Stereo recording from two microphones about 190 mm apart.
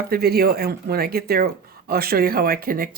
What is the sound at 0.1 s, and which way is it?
Speech, 55° right (ahead or behind).